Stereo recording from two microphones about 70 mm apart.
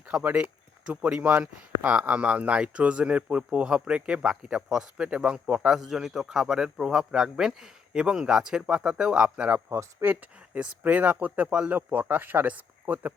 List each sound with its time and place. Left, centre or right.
0.2 s speech: right
9.6 s speech: right
10.6 s speech: centre